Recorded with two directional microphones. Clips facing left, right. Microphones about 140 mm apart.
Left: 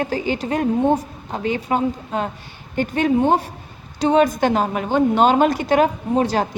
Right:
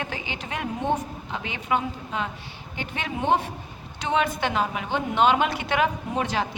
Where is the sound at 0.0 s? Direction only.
40° left (ahead or behind).